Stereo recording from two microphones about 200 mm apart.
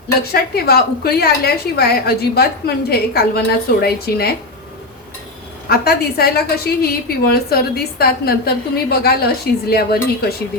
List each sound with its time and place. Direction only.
0.3 s a woman's voice: 50° left (ahead or behind)
5.6 s a woman's voice: 50° left (ahead or behind)